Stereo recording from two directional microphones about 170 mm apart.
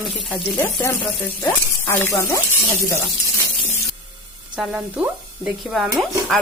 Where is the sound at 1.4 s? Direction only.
15° left (ahead or behind).